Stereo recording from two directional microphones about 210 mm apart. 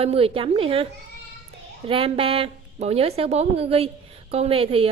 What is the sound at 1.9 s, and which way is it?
A woman's voice, 25° right (ahead or behind).